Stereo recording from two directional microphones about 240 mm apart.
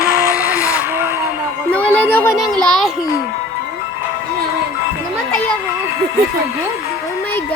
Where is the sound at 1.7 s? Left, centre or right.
Centre.